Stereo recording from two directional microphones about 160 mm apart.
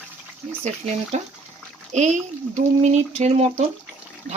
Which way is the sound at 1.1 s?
45° right (ahead or behind).